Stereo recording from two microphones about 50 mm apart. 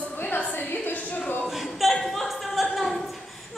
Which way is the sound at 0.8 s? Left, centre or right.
Left.